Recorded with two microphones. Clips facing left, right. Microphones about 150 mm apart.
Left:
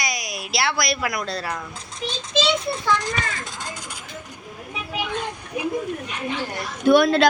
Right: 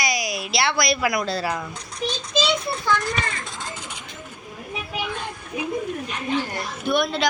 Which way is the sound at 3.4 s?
Centre (ahead or behind).